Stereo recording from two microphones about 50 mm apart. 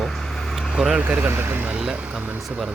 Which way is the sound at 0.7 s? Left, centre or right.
Centre.